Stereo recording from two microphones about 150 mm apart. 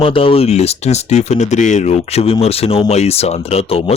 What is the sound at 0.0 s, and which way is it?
Speech, 35° left (ahead or behind).